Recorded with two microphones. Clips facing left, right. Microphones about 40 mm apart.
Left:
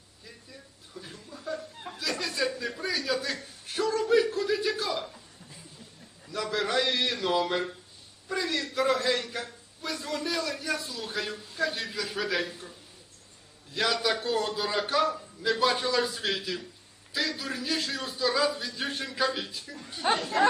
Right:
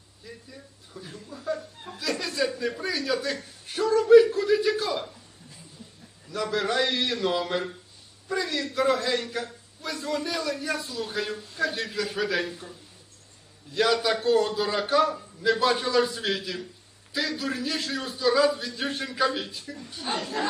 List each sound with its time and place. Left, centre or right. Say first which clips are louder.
1.1 s a sound: right 5 dB; centre
1.8 s chuckle: right 2 dB; centre
2.6 s a man's voice: right 3 dB; centre
6.3 s a man's voice: right 2 dB; centre
13.7 s a man's voice: right 4 dB; centre
20.1 s speech: left 4 dB; left